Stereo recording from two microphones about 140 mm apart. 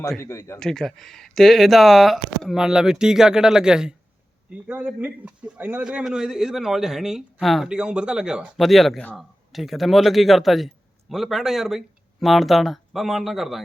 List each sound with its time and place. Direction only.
0.2 s speech: 20° left (ahead or behind)
0.6 s speech: 5° left (ahead or behind)